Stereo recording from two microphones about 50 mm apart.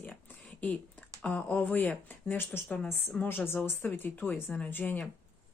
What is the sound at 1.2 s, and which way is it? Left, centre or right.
Speech, left.